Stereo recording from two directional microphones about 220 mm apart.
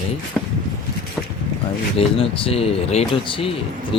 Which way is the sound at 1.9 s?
25° left (ahead or behind).